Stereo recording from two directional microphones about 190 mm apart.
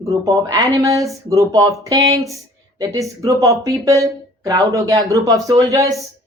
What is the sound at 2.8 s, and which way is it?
Speech, 15° right (ahead or behind).